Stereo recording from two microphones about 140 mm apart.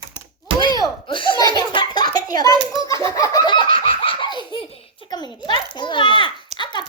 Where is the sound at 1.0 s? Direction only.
35° left (ahead or behind).